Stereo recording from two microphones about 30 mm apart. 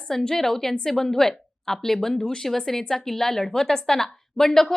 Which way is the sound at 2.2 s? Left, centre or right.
Left.